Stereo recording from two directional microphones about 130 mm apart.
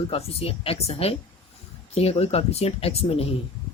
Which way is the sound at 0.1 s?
50° left (ahead or behind).